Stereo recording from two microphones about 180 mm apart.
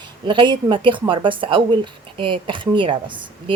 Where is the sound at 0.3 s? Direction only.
25° right (ahead or behind).